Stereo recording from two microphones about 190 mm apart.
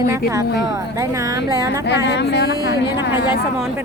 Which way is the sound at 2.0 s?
60° left (ahead or behind).